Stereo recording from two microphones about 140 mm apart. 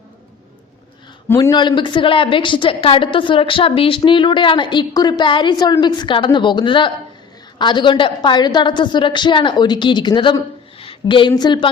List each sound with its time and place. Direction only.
1.4 s a woman's voice: 30° left (ahead or behind)
10.8 s a sound: 40° left (ahead or behind)
11.3 s a woman's voice: 30° left (ahead or behind)